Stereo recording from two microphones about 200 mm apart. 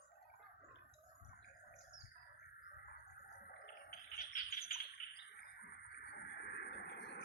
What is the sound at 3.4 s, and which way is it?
Bird, 45° left (ahead or behind).